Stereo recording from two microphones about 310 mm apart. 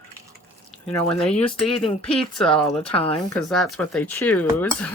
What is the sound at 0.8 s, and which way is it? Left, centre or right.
Speech, centre.